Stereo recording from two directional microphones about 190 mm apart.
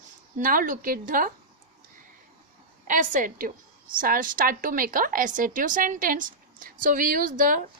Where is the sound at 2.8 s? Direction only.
45° right (ahead or behind).